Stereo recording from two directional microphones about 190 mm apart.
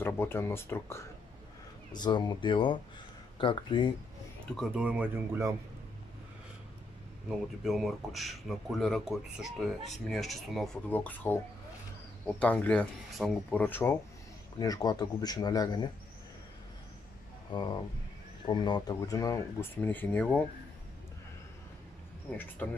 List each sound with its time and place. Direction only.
0.0 s speech: 10° left (ahead or behind)
4.6 s speech: 5° right (ahead or behind)
7.2 s speech: centre (ahead or behind)
12.4 s speech: 5° left (ahead or behind)
17.5 s speech: 25° left (ahead or behind); by 20.4 s 10° left (ahead or behind)
22.6 s speech: 10° left (ahead or behind)